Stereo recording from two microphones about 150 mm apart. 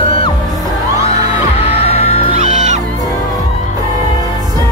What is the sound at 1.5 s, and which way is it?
Music, 45° left (ahead or behind).